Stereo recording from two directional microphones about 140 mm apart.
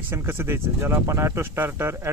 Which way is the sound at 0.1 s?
15° right (ahead or behind).